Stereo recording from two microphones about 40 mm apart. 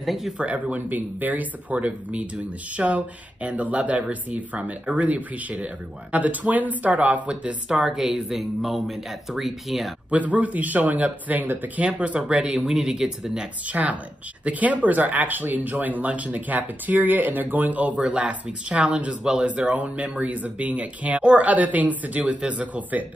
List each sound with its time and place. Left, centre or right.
0.0 s speech: centre
0.4 s speech: right; by 8.0 s centre
8.0 s speech: centre
10.1 s speech: right
11.8 s speech: right
12.5 s speech: centre
13.7 s speech: right
21.5 s speech: right